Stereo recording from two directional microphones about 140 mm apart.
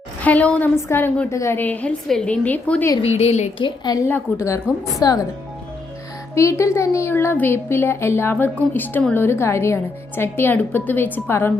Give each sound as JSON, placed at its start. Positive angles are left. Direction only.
{"t": 0.2, "sound": "speech", "side_deg": 10}
{"t": 3.0, "sound": "a woman's voice", "side_deg": 50}
{"t": 3.6, "sound": "a woman's voice", "side_deg": 30}
{"t": 4.0, "sound": "a woman's voice", "side_deg": 20}
{"t": 6.3, "sound": "speech", "side_deg": 20}